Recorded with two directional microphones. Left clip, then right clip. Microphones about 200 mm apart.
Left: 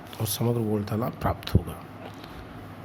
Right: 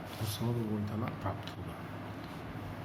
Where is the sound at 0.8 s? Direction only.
55° left (ahead or behind).